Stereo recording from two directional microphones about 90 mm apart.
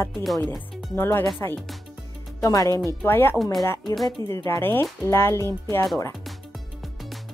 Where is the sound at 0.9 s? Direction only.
30° left (ahead or behind).